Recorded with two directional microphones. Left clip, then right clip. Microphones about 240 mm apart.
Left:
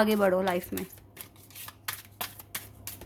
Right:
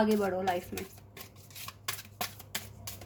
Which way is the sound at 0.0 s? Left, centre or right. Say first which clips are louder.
Left 5 dB; left.